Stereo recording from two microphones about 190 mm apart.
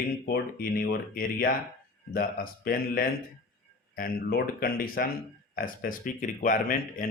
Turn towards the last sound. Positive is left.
turn(degrees=45)  # may be behind; listen again after turning